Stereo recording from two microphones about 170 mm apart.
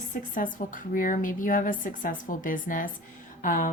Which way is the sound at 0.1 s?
50° left (ahead or behind).